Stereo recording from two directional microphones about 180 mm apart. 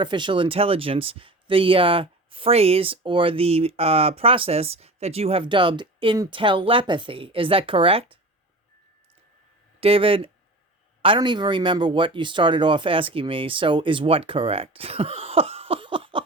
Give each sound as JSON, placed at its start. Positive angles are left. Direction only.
{"t": 0.0, "sound": "speech", "side_deg": -25}
{"t": 9.8, "sound": "speech", "side_deg": -30}